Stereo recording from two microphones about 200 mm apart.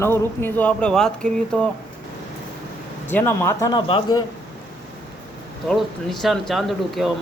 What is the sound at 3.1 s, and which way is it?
Speech, 10° left (ahead or behind).